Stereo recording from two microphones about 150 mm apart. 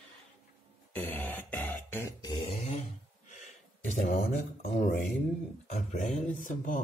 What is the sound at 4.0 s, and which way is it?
Speech, 60° left (ahead or behind).